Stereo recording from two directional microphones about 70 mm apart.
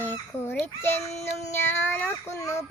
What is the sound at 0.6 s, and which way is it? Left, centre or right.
Child singing, left.